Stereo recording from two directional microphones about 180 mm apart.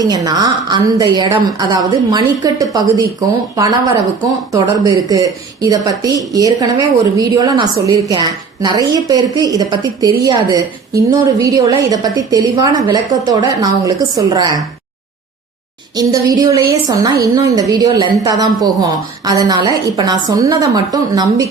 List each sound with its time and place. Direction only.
0.0 s a woman's voice: 20° right (ahead or behind)
16.0 s a woman's voice: 20° right (ahead or behind)